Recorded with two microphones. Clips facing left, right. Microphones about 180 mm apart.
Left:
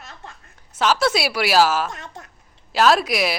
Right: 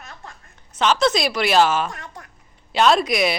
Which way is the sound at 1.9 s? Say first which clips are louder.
Left 1 dB; 25° left (ahead or behind).